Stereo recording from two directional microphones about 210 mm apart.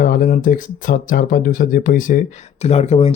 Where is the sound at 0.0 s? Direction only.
40° left (ahead or behind).